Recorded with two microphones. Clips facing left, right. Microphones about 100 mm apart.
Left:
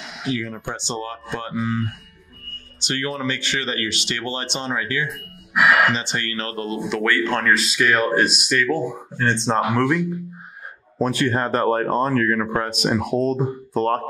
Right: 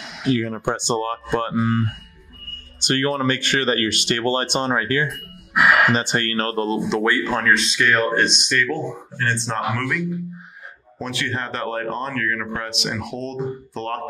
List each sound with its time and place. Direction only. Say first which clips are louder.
0.3 s speech: right 6 dB; 50° right (ahead or behind)
2.8 s speech: right 5 dB; 50° right (ahead or behind); by 7.2 s 25° right (ahead or behind)
7.2 s speech: even; 5° right (ahead or behind)
9.2 s speech: left 3 dB; 25° left (ahead or behind)
11.0 s speech: left 6 dB; 40° left (ahead or behind)